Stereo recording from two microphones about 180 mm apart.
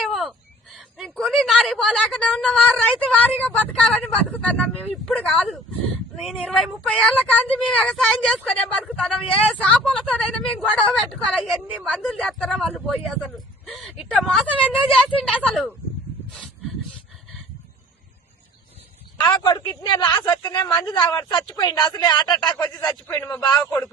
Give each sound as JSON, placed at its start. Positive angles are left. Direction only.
{"t": 0.0, "sound": "speech", "side_deg": 0}
{"t": 19.3, "sound": "speech", "side_deg": 25}
{"t": 22.5, "sound": "a man's voice", "side_deg": 10}